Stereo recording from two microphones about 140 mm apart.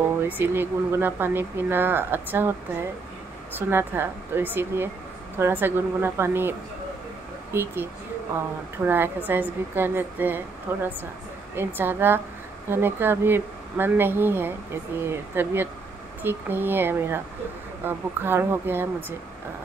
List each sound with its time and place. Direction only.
0.3 s speech: 15° right (ahead or behind)
3.5 s speech: 15° right (ahead or behind)
7.5 s speech: 15° right (ahead or behind)